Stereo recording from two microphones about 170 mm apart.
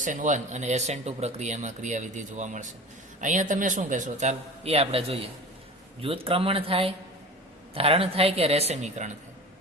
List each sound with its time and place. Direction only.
0.0 s a woman's voice: 50° right (ahead or behind)